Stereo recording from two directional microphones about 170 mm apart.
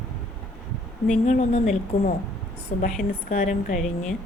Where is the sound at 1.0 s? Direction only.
45° left (ahead or behind).